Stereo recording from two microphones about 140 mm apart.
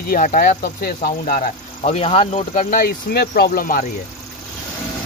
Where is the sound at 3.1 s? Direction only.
90° left.